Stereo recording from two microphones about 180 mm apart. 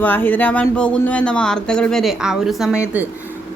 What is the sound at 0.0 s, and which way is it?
A man's voice, 10° left (ahead or behind).